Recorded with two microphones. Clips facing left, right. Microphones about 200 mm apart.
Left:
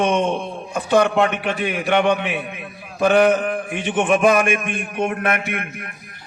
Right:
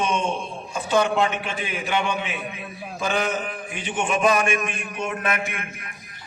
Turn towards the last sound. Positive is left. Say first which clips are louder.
# left 5 dB
turn(degrees=60)  # may be behind; listen again after turning